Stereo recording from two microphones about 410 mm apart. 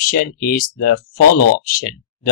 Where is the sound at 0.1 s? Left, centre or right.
Left.